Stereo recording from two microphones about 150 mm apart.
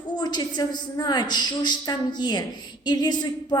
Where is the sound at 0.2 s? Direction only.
30° left (ahead or behind).